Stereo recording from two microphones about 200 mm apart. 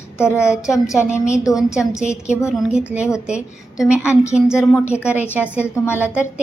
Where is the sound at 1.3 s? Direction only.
15° left (ahead or behind).